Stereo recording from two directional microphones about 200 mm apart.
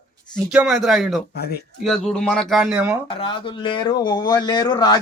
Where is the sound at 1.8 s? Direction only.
Centre (ahead or behind).